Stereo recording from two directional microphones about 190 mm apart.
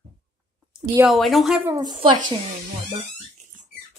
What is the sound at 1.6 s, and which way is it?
Speech, 15° right (ahead or behind).